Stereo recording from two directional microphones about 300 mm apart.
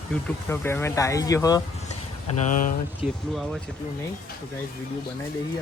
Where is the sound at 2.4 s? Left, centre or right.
Left.